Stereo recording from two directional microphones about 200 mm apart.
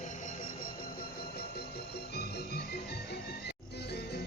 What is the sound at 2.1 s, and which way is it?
Music, 50° left (ahead or behind).